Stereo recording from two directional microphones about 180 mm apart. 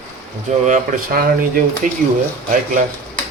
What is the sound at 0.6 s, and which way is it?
Speech, 50° right (ahead or behind).